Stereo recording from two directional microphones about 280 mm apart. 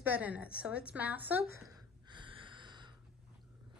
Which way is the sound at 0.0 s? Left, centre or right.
Centre.